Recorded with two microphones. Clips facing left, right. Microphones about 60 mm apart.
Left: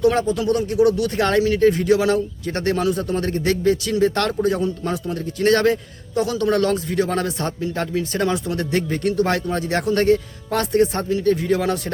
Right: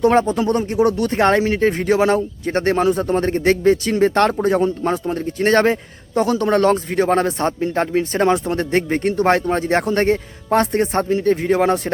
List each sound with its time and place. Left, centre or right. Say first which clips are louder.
0.0 s a man's voice: right 3 dB; right